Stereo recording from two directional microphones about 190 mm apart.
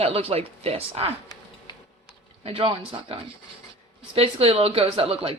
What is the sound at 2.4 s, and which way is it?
A woman's voice, 30° right (ahead or behind).